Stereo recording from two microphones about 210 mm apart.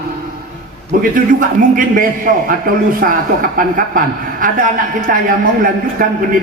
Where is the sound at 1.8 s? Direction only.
40° right (ahead or behind).